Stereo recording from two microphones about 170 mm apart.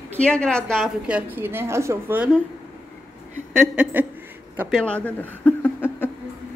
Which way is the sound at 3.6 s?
5° right (ahead or behind).